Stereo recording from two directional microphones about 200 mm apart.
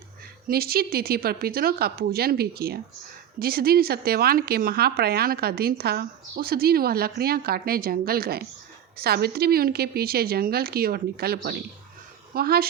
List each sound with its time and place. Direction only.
0.4 s speech: 50° right (ahead or behind)